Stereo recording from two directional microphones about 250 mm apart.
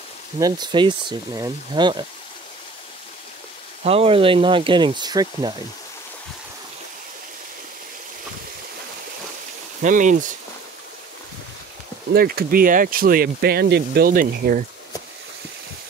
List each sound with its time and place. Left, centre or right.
0.4 s speech: centre
3.8 s speech: right
9.8 s speech: right
12.1 s speech: right